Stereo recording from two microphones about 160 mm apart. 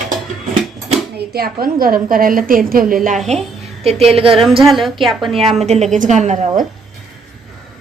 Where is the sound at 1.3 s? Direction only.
70° right (ahead or behind).